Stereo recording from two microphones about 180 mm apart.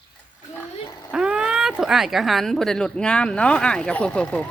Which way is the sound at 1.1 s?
5° right (ahead or behind).